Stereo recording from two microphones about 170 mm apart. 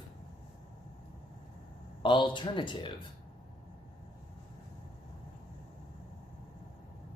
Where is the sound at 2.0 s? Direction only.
25° left (ahead or behind).